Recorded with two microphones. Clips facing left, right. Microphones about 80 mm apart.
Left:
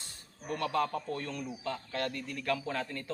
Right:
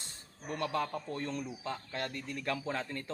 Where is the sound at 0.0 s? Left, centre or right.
Right.